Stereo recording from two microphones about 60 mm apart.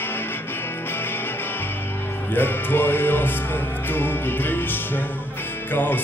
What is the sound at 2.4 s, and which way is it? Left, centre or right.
Music, left.